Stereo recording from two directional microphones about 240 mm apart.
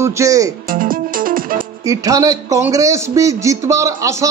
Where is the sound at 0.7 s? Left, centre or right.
Right.